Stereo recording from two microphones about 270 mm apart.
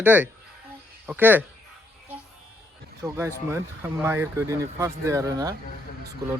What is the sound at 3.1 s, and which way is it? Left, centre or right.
Speech, centre.